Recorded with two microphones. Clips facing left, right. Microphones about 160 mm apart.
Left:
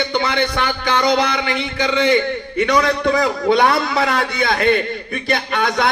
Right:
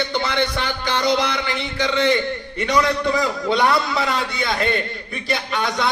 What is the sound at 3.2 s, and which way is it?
A man's voice, 55° left (ahead or behind).